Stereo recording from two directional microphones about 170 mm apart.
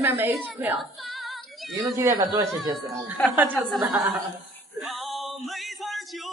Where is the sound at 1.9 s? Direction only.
15° right (ahead or behind).